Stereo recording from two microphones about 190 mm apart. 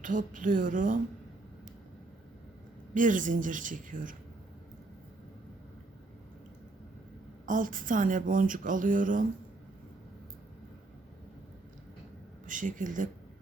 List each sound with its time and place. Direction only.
0.0 s speech: 45° right (ahead or behind)
2.9 s speech: 45° right (ahead or behind)
7.4 s speech: 45° right (ahead or behind)
12.5 s speech: 45° right (ahead or behind)